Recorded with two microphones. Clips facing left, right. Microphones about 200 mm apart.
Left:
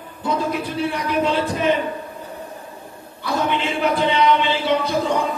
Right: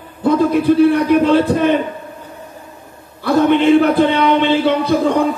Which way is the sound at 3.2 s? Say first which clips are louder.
Right 10 dB; 55° right (ahead or behind).